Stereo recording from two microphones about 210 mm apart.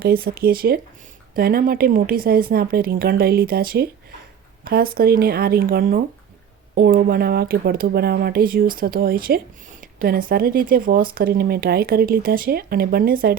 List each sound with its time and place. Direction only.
0.0 s speech: 45° right (ahead or behind)